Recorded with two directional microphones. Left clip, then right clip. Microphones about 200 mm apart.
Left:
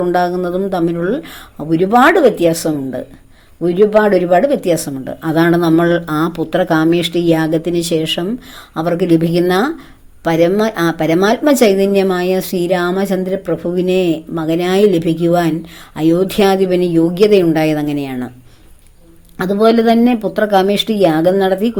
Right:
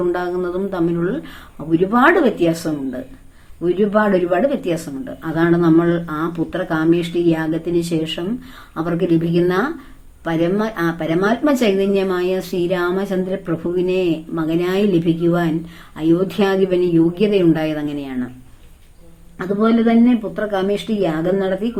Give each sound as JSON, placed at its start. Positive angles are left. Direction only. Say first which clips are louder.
{"t": 0.1, "sound": "speech", "louder": "left 6 dB", "side_deg": 35}
{"t": 19.4, "sound": "a woman's voice", "louder": "left 6 dB", "side_deg": 50}